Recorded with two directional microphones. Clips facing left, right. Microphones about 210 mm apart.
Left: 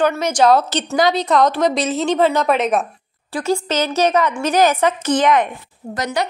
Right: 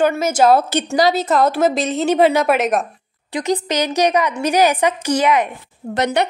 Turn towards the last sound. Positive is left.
turn(degrees=-65)  # may be behind; listen again after turning